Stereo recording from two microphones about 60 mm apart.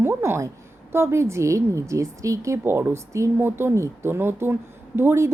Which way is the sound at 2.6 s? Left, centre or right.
Right.